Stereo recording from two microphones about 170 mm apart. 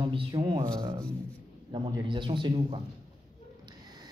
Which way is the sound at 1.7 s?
30° right (ahead or behind).